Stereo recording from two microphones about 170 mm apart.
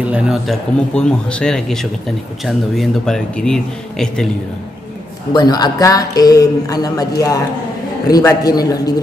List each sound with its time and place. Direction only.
0.0 s speech: 5° right (ahead or behind)
5.3 s speech: 25° left (ahead or behind)